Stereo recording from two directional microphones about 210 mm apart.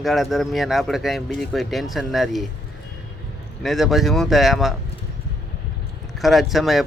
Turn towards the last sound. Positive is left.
turn(degrees=0)  # may be behind; listen again after turning